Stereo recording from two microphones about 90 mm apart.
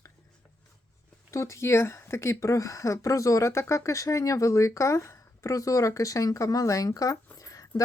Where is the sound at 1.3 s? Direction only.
35° left (ahead or behind).